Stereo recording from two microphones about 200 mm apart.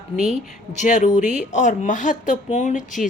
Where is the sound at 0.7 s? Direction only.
35° left (ahead or behind).